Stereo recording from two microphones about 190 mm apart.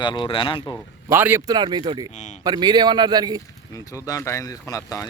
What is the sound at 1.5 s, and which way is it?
Speech, 20° right (ahead or behind).